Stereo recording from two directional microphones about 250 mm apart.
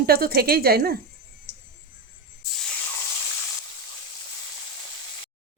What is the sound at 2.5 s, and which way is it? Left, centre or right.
Snake, centre.